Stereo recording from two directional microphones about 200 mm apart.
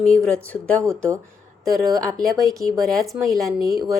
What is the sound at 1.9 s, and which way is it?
Speech, 20° right (ahead or behind).